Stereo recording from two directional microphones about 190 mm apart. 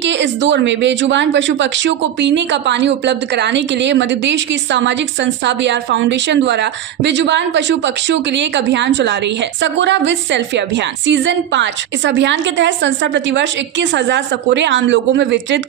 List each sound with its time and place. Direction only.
0.0 s speech: 70° right (ahead or behind)